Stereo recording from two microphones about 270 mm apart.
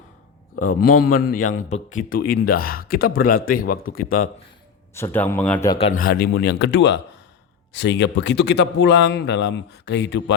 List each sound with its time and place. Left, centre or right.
0.6 s a man's voice: left
4.9 s a man's voice: centre
5.8 s a man's voice: left